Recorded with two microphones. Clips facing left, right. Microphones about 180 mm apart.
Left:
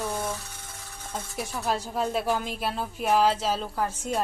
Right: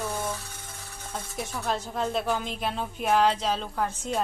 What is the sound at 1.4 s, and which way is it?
Speech, 5° left (ahead or behind).